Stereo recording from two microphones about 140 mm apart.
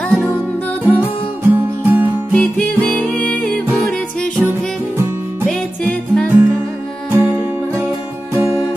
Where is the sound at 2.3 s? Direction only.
5° left (ahead or behind).